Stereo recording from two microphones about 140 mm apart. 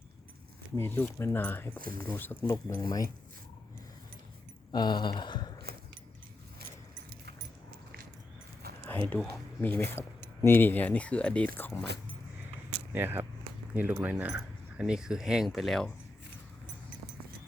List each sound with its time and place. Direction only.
0.8 s speech: 15° left (ahead or behind)
1.8 s speech: 90° right
2.1 s speech: 15° left (ahead or behind)
2.5 s speech: 25° left (ahead or behind)
4.7 s speech: 30° left (ahead or behind)
8.9 s speech: 10° left (ahead or behind)
12.9 s speech: 15° right (ahead or behind); by 15.9 s centre (ahead or behind)